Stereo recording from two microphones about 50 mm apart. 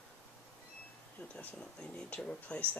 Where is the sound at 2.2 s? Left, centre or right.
Left.